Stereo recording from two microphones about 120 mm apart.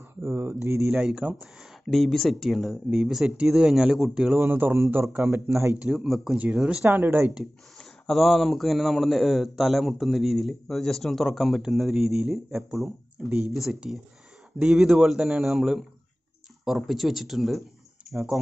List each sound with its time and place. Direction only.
0.2 s speech: 20° right (ahead or behind)
0.8 s speech: 5° right (ahead or behind)
1.9 s a man's voice: centre (ahead or behind)
4.4 s speech: 15° right (ahead or behind)
5.8 s a man's voice: 5° right (ahead or behind)
7.7 s a man's voice: centre (ahead or behind)